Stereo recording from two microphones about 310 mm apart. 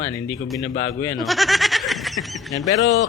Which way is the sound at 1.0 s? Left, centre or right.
Centre.